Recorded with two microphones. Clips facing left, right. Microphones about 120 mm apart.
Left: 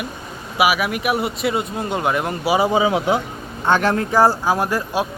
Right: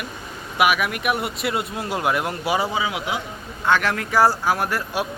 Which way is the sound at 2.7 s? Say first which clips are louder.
Left 8 dB; 30° left (ahead or behind).